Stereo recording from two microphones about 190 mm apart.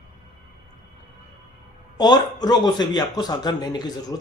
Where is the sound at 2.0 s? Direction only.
20° left (ahead or behind).